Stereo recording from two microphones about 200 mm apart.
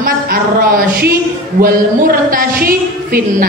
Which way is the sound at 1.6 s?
45° right (ahead or behind).